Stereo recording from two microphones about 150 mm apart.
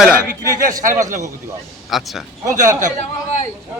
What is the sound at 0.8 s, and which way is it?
Speech, 60° right (ahead or behind).